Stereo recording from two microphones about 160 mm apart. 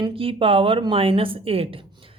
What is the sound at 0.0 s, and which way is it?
Speech, 35° right (ahead or behind).